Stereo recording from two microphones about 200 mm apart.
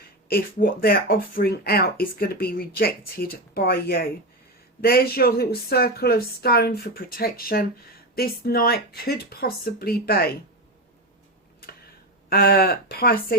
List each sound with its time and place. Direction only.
0.3 s speech: 50° left (ahead or behind)
12.3 s speech: 50° left (ahead or behind)